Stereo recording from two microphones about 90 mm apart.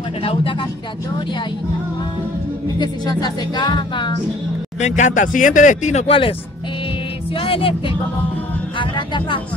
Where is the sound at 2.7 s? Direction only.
55° left (ahead or behind).